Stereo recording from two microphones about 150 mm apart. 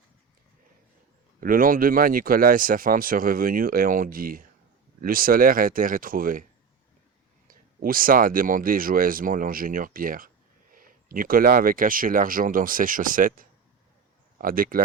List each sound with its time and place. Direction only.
1.4 s speech: 70° right (ahead or behind)
7.4 s speech: 70° right (ahead or behind)